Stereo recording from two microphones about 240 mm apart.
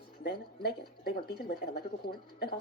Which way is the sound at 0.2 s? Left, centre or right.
Left.